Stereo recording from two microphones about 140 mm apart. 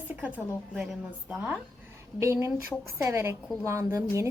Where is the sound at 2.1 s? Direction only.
20° right (ahead or behind).